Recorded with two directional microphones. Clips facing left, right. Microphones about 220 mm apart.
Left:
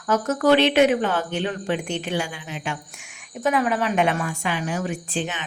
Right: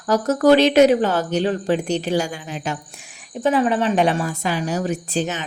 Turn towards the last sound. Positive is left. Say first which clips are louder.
# right 5 dB
turn(degrees=-40)  # may be behind; listen again after turning